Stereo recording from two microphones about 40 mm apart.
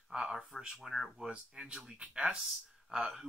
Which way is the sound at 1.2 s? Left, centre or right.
Right.